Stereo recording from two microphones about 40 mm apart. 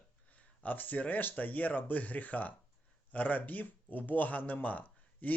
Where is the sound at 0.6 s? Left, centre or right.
Left.